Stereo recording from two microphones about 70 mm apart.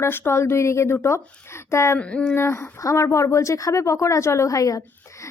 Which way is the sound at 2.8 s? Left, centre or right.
Left.